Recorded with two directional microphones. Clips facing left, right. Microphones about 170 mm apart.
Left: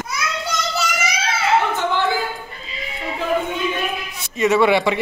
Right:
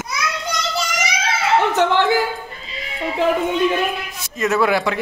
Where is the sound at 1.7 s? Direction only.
75° right (ahead or behind).